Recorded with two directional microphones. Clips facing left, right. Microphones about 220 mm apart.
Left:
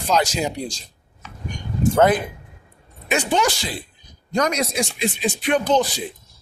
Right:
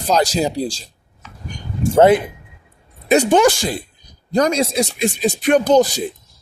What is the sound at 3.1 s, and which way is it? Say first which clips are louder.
Speech: right 8 dB; 40° right (ahead or behind).